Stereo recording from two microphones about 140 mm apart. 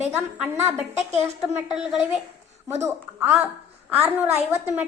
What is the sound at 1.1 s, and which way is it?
Speech, 50° right (ahead or behind).